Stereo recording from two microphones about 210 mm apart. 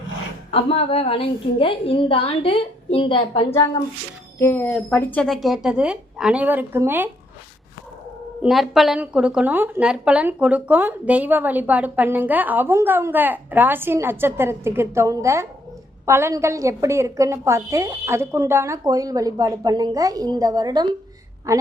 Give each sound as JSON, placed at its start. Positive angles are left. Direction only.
{"t": 0.5, "sound": "a woman's voice", "side_deg": 30}
{"t": 4.4, "sound": "speech", "side_deg": 10}
{"t": 8.4, "sound": "a woman's voice", "side_deg": 0}